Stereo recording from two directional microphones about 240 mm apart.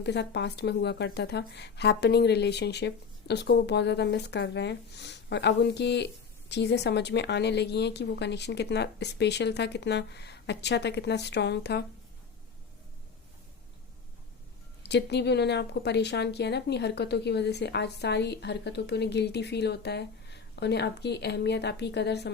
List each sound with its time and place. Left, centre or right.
0.0 s a woman's voice: left
14.8 s a woman's voice: left